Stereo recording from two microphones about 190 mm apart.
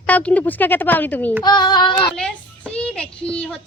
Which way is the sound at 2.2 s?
5° left (ahead or behind).